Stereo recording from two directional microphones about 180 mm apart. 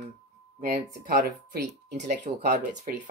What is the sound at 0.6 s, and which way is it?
Speech, 50° right (ahead or behind).